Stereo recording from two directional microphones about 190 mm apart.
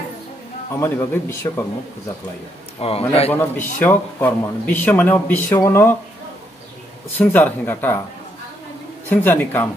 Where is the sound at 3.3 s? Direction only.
10° left (ahead or behind).